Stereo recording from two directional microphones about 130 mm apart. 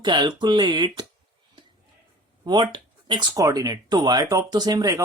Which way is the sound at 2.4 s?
35° right (ahead or behind).